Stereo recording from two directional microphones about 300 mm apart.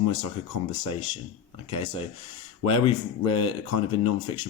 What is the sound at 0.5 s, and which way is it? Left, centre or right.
Speech, left.